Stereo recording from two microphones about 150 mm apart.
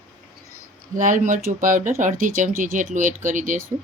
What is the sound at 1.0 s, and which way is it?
Speech, 60° right (ahead or behind).